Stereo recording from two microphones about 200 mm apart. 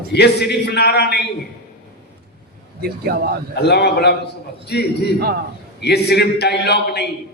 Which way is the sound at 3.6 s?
55° left (ahead or behind).